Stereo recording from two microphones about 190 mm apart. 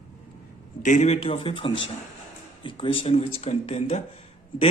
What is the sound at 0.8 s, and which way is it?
Speech, 40° left (ahead or behind).